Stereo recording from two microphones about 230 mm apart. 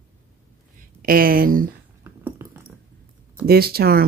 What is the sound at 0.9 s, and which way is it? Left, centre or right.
Speech, right.